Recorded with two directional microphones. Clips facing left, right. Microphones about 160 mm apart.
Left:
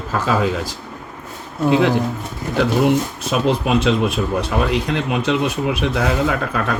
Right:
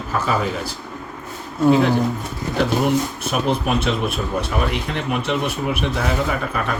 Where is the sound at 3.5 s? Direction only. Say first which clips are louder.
Left 4 dB; 90° left.